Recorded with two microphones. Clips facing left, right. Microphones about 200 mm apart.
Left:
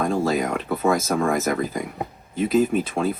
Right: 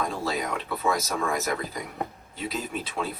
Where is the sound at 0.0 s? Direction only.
50° left (ahead or behind).